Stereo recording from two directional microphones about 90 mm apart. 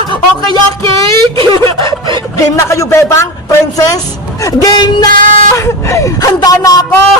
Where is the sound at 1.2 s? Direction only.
90° right.